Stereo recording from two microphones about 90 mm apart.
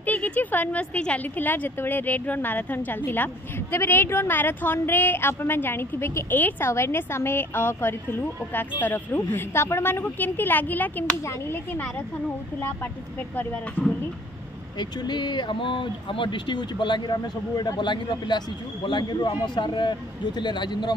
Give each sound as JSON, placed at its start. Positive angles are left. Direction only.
{"t": 0.0, "sound": "speech", "side_deg": 20}
{"t": 14.8, "sound": "speech", "side_deg": 55}